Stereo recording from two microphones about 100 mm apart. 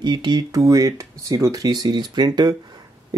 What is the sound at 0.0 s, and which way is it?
Speech, 45° right (ahead or behind).